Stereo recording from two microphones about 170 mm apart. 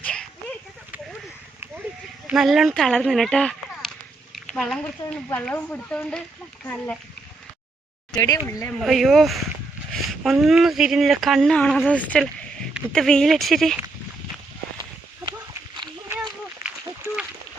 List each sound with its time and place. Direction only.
0.0 s a sound: 5° left (ahead or behind)
2.2 s speech: centre (ahead or behind)
8.1 s speech: 20° left (ahead or behind)
8.8 s speech: centre (ahead or behind)